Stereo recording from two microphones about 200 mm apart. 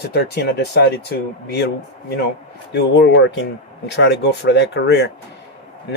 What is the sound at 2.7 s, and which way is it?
Speech, 60° left (ahead or behind).